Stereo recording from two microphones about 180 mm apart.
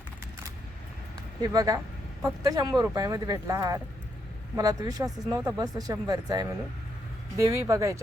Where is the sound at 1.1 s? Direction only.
20° right (ahead or behind).